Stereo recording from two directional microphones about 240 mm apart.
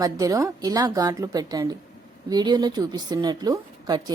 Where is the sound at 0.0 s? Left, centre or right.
Centre.